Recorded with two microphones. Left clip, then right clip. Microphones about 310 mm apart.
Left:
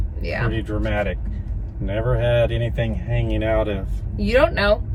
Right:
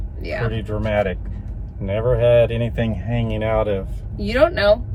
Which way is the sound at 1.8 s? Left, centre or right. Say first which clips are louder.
Right 5 dB; centre.